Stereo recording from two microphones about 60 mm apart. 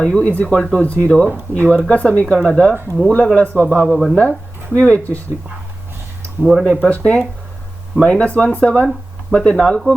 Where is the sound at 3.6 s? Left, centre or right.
Right.